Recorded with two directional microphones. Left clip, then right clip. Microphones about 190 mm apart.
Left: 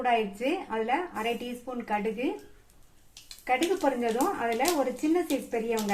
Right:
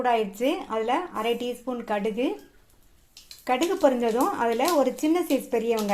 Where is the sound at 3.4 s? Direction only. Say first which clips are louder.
Right 4 dB; 45° right (ahead or behind).